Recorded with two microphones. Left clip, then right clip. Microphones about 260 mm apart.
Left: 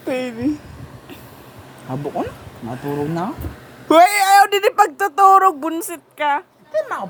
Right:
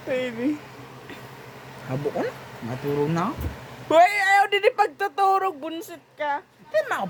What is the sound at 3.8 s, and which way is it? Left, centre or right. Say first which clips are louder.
A woman's voice: left 6 dB; left.